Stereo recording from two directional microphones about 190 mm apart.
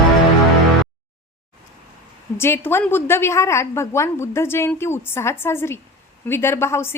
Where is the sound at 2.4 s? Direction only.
10° left (ahead or behind).